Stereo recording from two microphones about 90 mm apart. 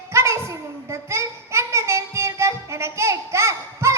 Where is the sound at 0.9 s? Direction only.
30° right (ahead or behind).